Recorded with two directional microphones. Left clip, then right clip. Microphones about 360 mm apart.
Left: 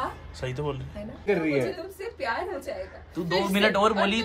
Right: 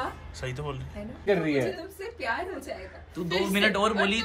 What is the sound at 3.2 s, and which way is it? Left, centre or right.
A man's voice, left.